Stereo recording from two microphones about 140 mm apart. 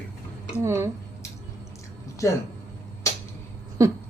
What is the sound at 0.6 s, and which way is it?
Speech, 20° right (ahead or behind).